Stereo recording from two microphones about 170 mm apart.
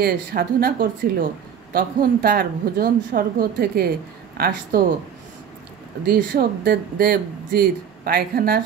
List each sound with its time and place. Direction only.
0.0 s speech: 60° right (ahead or behind)
6.0 s speech: 60° right (ahead or behind)